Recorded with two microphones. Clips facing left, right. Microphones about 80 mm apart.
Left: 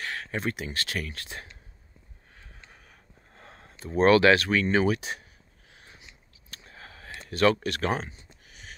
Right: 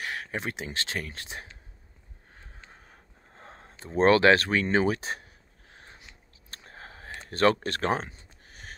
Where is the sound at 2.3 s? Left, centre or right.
Right.